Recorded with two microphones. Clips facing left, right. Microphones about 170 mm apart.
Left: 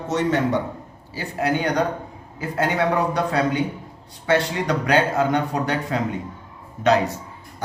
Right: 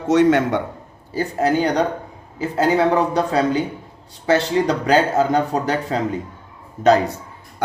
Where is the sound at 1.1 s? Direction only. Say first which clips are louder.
Right 5 dB; 40° right (ahead or behind).